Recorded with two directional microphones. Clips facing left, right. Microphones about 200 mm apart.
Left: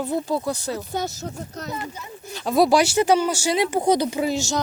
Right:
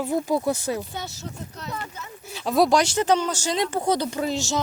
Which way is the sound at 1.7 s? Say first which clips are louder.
Left 3 dB; 10° left (ahead or behind).